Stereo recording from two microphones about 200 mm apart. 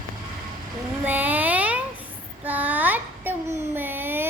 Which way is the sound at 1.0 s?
10° right (ahead or behind).